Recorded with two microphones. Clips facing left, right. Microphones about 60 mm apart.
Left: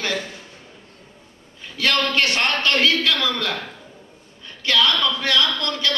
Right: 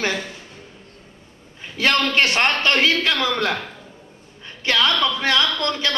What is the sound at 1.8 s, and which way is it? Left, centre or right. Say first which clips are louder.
A man's voice: right 2 dB; right.